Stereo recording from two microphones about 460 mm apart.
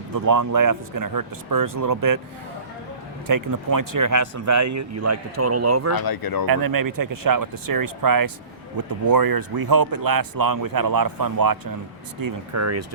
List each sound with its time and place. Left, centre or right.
0.1 s speech: right
3.2 s a man's voice: right
5.9 s speech: left
6.5 s speech: right
12.2 s a man's voice: right